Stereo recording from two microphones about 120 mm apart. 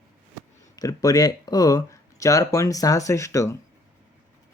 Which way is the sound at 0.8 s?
30° left (ahead or behind).